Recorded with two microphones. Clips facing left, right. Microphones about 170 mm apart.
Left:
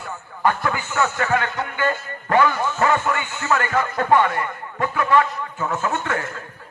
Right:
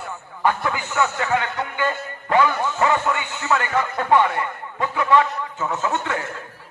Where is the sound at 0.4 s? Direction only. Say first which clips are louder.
Even; 15° right (ahead or behind).